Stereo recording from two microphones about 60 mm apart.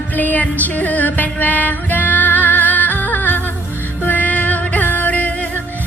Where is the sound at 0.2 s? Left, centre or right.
Left.